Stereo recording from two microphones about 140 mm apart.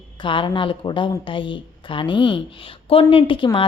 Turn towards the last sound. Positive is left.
turn(degrees=35)  # may be behind; listen again after turning